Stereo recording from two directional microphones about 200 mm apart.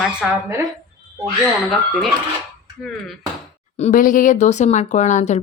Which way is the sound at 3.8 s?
35° left (ahead or behind).